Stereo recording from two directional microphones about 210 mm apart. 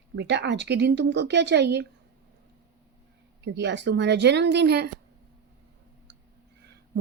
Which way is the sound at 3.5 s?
55° right (ahead or behind).